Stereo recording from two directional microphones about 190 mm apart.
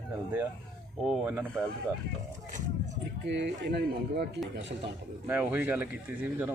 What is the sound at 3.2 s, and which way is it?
Speech, 65° right (ahead or behind).